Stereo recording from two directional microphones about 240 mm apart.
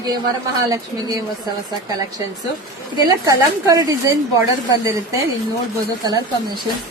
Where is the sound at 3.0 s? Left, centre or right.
Centre.